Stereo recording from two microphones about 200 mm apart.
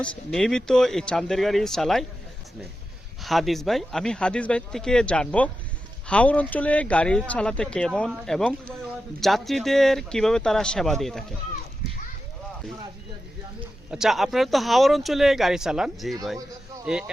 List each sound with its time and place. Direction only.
0.0 s speech: 5° left (ahead or behind)
3.2 s speech: centre (ahead or behind)
13.9 s speech: centre (ahead or behind)